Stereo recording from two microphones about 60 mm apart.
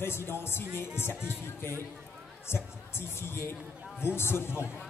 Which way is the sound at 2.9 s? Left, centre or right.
Left.